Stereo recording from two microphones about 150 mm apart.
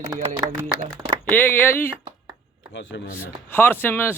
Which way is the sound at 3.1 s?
15° left (ahead or behind).